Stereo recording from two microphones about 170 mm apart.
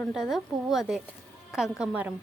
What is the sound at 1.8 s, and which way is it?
Speech, 5° right (ahead or behind).